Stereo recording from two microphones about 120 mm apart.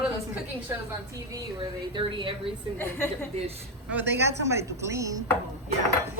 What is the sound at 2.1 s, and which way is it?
Speech, 45° right (ahead or behind).